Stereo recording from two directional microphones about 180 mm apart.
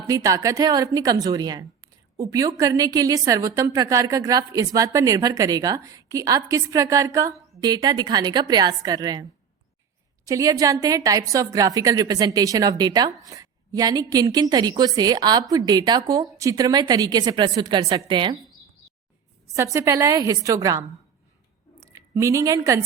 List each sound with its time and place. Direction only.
0.1 s a woman's voice: 20° right (ahead or behind)
10.2 s a woman's voice: 20° right (ahead or behind)
19.5 s a woman's voice: 15° right (ahead or behind)